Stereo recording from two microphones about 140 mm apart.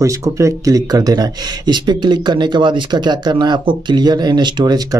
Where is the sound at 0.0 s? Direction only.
20° right (ahead or behind).